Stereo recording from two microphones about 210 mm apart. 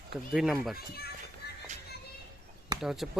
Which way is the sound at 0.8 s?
50° left (ahead or behind).